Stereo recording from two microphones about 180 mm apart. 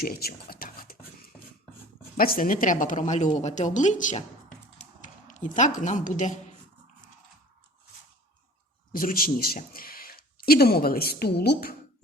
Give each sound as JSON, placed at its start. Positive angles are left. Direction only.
{"t": 0.0, "sound": "speech", "side_deg": 60}
{"t": 2.1, "sound": "a woman's voice", "side_deg": 55}
{"t": 8.9, "sound": "speech", "side_deg": 50}